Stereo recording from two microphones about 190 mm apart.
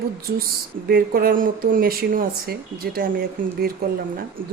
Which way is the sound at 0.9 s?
50° right (ahead or behind).